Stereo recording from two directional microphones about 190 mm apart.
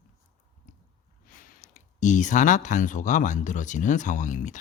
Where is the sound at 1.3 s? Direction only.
45° left (ahead or behind).